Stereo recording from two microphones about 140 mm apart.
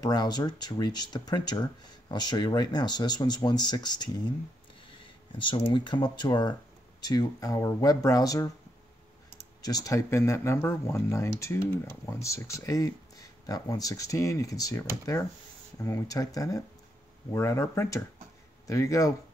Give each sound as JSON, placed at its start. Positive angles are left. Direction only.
{"t": 0.0, "sound": "speech", "side_deg": 30}
{"t": 9.6, "sound": "speech", "side_deg": 25}